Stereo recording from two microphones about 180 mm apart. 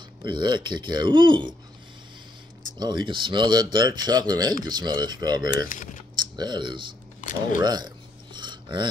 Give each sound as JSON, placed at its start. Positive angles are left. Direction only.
{"t": 0.2, "sound": "speech", "side_deg": -25}
{"t": 2.8, "sound": "speech", "side_deg": -25}
{"t": 5.7, "sound": "speech", "side_deg": 50}
{"t": 6.1, "sound": "speech", "side_deg": -25}
{"t": 7.2, "sound": "speech", "side_deg": 45}
{"t": 7.6, "sound": "a sound", "side_deg": -25}